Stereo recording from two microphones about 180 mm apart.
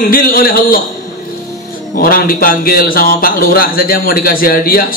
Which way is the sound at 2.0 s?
55° left (ahead or behind).